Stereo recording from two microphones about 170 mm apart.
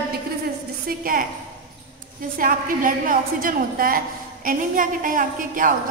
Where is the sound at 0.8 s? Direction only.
55° right (ahead or behind).